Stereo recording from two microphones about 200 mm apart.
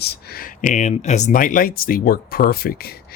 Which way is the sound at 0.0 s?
50° left (ahead or behind).